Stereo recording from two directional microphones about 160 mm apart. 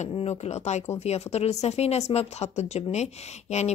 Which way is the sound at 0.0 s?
40° left (ahead or behind).